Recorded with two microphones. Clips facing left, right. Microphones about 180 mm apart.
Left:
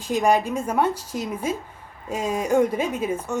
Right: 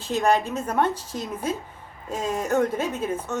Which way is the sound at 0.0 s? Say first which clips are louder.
Left 2 dB; 10° left (ahead or behind).